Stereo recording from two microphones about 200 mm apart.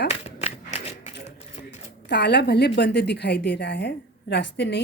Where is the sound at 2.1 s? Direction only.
60° left (ahead or behind).